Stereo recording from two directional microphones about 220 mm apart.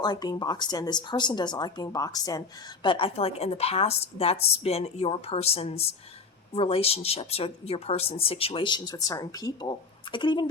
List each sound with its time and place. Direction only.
0.0 s speech: 20° left (ahead or behind)